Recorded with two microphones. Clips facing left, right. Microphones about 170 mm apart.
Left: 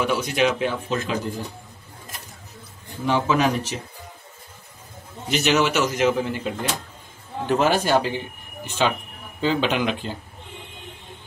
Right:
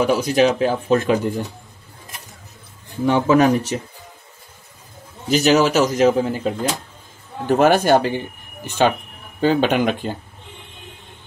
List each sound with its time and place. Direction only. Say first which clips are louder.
0.0 s a man's voice: right 5 dB; 35° right (ahead or behind)
0.9 s speech: right 8 dB; 55° right (ahead or behind)
3.1 s speech: right 6 dB; 50° right (ahead or behind)
5.3 s a man's voice: right 5 dB; 35° right (ahead or behind)
7.4 s speech: right 6 dB; 55° right (ahead or behind)